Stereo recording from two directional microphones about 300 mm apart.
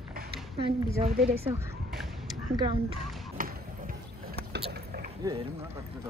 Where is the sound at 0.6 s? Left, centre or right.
Centre.